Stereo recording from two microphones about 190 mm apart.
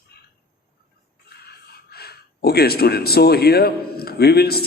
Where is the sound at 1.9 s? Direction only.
55° left (ahead or behind).